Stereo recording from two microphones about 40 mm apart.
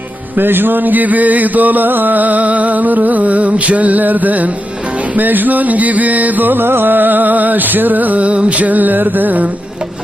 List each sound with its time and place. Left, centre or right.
0.3 s music: right